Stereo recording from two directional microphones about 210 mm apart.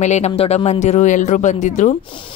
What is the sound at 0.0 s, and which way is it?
Speech, 30° left (ahead or behind).